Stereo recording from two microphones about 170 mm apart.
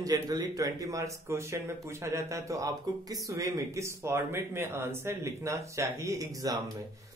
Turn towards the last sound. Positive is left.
turn(degrees=-20)  # may be behind; listen again after turning